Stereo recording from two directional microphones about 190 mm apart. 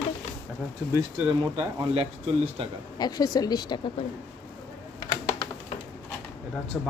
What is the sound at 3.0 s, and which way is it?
Speech, 20° left (ahead or behind).